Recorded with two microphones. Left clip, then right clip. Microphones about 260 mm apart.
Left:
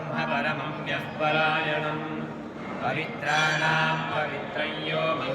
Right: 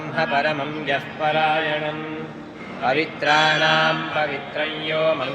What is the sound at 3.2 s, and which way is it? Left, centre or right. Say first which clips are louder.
Speech: right 6 dB; right.